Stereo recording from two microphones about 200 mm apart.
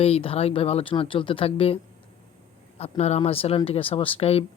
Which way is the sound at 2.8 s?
30° left (ahead or behind).